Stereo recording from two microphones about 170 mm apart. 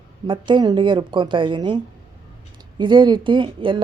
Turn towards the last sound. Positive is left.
turn(degrees=-30)  # may be behind; listen again after turning